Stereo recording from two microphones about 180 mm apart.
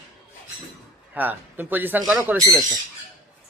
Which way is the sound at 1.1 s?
10° right (ahead or behind).